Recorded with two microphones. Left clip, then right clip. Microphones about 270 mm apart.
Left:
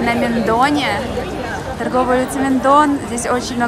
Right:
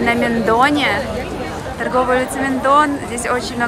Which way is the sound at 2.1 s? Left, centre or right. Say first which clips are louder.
Left 1 dB; centre.